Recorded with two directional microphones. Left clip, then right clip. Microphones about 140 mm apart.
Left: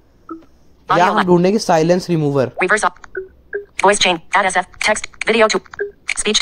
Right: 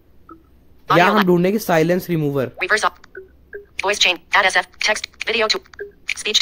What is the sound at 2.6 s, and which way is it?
A woman's voice, 15° right (ahead or behind).